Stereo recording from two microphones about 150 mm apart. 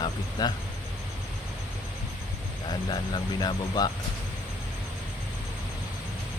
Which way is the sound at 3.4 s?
25° left (ahead or behind).